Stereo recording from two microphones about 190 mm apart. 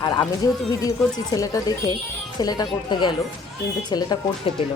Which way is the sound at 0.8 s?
20° left (ahead or behind).